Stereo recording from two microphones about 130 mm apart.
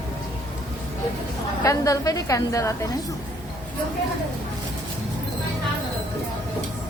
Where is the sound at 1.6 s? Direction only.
25° left (ahead or behind).